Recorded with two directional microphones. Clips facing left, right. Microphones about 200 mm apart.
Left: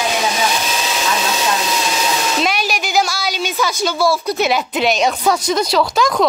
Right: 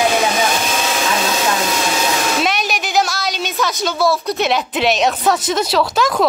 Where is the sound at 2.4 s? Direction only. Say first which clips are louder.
Even; centre (ahead or behind).